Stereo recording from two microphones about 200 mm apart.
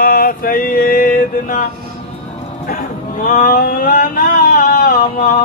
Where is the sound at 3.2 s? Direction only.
40° left (ahead or behind).